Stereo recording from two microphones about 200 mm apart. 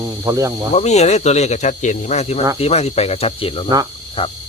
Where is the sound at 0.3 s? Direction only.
15° right (ahead or behind).